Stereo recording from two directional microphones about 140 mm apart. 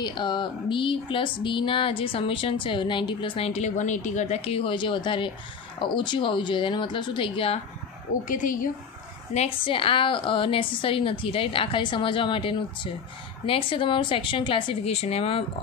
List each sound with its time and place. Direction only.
0.0 s speech: 35° left (ahead or behind)
8.3 s a woman's voice: 70° left (ahead or behind)
9.3 s speech: 45° left (ahead or behind)